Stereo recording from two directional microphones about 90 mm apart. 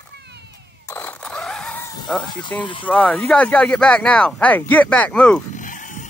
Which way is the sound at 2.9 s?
15° left (ahead or behind).